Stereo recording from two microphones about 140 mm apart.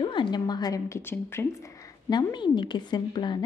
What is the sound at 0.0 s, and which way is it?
A woman's voice, 35° left (ahead or behind).